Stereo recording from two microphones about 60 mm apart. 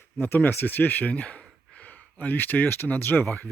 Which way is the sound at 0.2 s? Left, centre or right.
Left.